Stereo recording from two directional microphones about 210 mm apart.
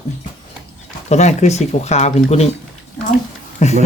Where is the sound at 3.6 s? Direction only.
35° left (ahead or behind).